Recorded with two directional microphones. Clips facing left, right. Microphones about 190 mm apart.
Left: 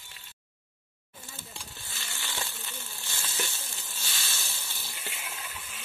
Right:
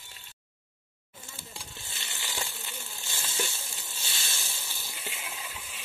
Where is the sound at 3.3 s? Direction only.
15° right (ahead or behind).